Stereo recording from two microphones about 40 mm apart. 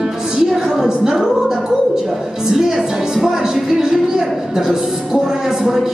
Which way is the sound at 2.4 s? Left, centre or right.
Centre.